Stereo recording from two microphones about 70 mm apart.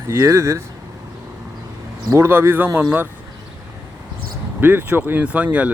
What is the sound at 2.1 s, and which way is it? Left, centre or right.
Speech, right.